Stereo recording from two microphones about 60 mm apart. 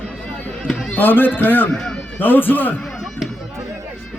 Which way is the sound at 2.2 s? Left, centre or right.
Left.